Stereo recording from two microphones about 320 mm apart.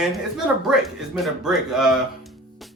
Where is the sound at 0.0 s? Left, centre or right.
Centre.